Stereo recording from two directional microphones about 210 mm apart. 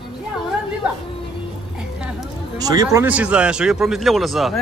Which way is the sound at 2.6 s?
15° right (ahead or behind).